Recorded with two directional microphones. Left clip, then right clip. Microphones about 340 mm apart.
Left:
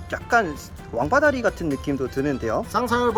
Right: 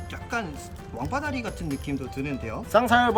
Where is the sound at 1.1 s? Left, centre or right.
Centre.